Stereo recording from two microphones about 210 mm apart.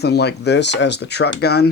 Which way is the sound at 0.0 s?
50° left (ahead or behind).